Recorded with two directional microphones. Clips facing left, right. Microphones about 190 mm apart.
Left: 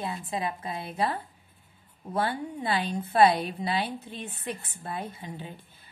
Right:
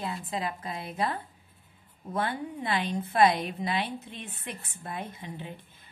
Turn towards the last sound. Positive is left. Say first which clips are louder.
# even
turn(degrees=35)  # may be behind; listen again after turning